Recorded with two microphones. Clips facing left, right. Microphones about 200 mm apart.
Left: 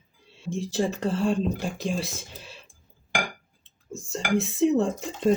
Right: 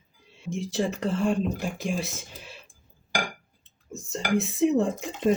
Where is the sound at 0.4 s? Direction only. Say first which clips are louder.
Left 1 dB; 20° right (ahead or behind).